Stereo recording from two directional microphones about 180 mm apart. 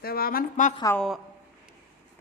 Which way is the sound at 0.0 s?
55° left (ahead or behind).